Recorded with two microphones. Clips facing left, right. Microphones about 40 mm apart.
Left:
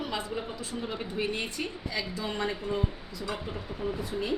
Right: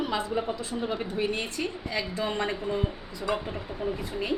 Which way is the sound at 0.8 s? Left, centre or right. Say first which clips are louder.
Right 6 dB; centre.